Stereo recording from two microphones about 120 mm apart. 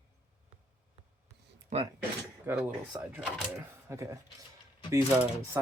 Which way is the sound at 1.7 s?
90° right.